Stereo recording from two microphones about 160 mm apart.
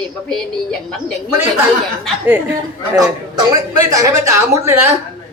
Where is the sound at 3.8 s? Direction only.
20° right (ahead or behind).